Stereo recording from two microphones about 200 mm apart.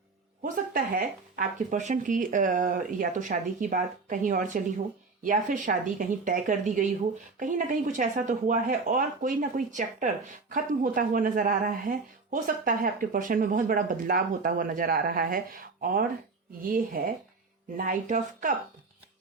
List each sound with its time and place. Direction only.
0.4 s speech: 45° right (ahead or behind)